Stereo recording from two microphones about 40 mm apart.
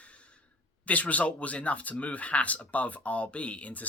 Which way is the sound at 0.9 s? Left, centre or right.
Left.